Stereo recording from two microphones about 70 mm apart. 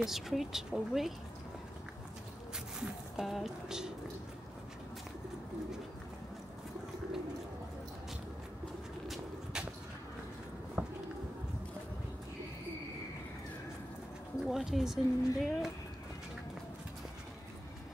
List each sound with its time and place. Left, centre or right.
0.0 s speech: centre
2.8 s speech: centre
9.0 s walk: centre
10.8 s a sound: right
14.4 s speech: centre